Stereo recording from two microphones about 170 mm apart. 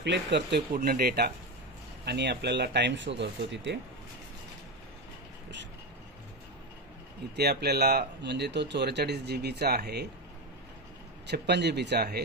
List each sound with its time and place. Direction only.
0.0 s speech: 90° right
0.7 s speech: 65° right (ahead or behind)
2.0 s speech: 85° right
7.3 s speech: 70° right (ahead or behind)
11.2 s speech: 85° right